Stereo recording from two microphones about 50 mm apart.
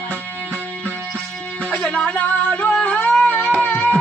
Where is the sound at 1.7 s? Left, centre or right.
Left.